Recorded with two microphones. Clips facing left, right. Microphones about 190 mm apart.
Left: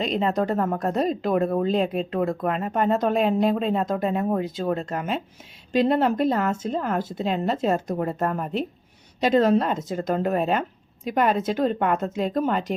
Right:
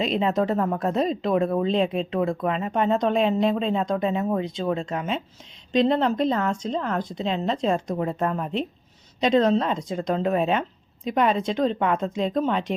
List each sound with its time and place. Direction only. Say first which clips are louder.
0.0 s speech: right 1 dB; centre (ahead or behind)